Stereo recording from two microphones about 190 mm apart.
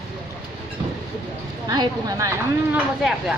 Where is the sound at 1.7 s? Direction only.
20° right (ahead or behind).